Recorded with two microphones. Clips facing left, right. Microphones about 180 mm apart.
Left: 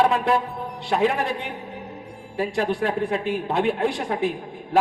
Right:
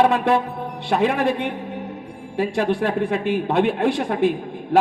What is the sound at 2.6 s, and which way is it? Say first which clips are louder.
A man's voice: right 2 dB; 60° right (ahead or behind).